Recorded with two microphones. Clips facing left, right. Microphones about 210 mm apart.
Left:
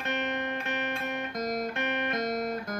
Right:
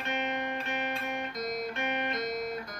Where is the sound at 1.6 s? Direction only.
50° left (ahead or behind).